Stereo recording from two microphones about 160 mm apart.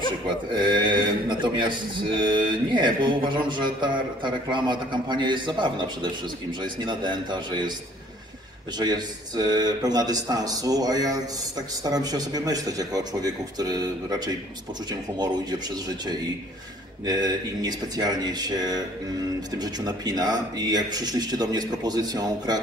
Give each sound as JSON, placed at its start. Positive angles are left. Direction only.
{"t": 0.5, "sound": "speech", "side_deg": -30}
{"t": 8.7, "sound": "speech", "side_deg": -25}
{"t": 17.0, "sound": "speech", "side_deg": -25}